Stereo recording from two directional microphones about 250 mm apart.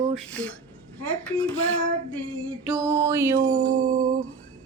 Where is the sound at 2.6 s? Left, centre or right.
Centre.